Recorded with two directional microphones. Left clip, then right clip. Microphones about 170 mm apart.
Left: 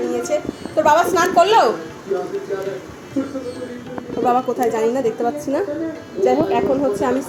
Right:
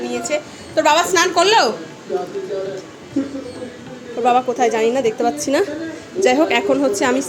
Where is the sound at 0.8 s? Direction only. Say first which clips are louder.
Even; 10° right (ahead or behind).